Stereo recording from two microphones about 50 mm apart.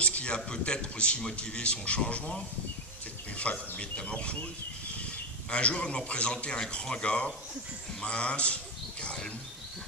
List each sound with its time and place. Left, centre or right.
0.0 s a man's voice: left